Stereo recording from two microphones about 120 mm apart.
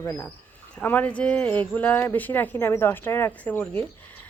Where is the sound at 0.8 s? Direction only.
15° left (ahead or behind).